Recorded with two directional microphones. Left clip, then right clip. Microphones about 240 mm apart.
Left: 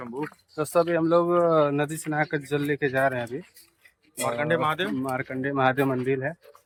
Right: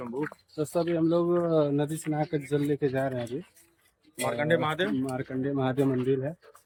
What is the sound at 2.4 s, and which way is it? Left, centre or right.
Speech, centre.